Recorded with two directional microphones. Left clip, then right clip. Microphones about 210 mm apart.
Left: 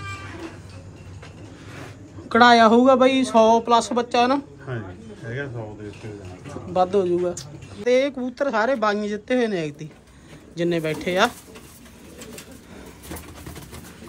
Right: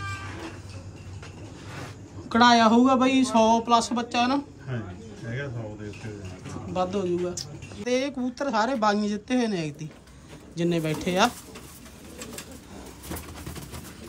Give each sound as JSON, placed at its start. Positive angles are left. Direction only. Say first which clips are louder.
{"t": 2.2, "sound": "speech", "louder": "left 5 dB", "side_deg": -15}
{"t": 6.7, "sound": "speech", "louder": "left 7 dB", "side_deg": -10}